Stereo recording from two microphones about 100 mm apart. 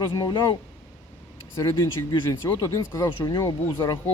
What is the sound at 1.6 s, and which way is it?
Speech, 35° left (ahead or behind).